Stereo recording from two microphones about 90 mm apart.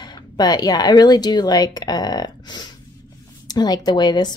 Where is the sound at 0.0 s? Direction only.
50° left (ahead or behind).